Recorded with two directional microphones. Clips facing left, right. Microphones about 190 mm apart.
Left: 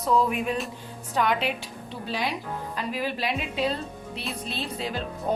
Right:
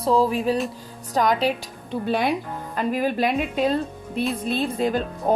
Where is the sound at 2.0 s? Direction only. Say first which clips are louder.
Right 7 dB; 55° right (ahead or behind).